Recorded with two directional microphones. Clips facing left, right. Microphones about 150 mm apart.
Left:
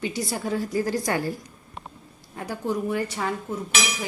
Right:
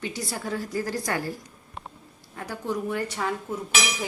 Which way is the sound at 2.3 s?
20° left (ahead or behind).